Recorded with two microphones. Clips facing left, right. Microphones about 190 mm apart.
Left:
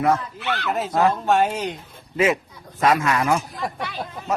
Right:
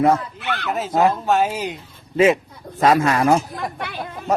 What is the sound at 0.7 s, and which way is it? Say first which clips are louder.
Speech: right 2 dB; centre (ahead or behind).